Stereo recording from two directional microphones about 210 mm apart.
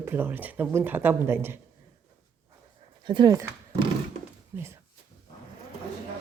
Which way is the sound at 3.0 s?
20° right (ahead or behind).